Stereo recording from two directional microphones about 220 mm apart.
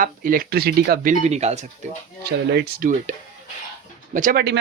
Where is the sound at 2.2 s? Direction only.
45° right (ahead or behind).